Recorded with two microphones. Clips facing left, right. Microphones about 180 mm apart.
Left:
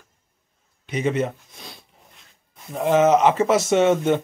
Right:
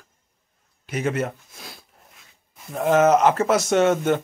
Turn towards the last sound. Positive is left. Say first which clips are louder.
# left 1 dB
turn(degrees=0)  # may be behind; listen again after turning